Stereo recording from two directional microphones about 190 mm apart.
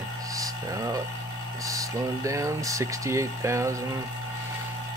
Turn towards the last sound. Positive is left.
turn(degrees=-15)  # may be behind; listen again after turning